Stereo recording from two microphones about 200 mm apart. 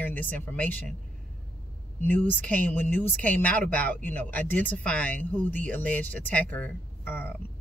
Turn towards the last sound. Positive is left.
turn(degrees=10)  # may be behind; listen again after turning